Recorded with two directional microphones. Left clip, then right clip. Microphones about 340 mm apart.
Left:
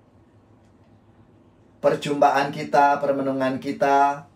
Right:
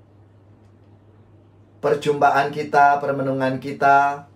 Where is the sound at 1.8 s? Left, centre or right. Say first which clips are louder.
Right 1 dB; centre.